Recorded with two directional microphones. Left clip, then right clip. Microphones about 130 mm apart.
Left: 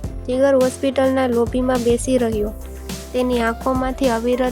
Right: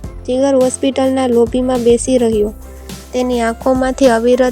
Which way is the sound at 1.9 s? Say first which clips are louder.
Right 9 dB; 10° right (ahead or behind).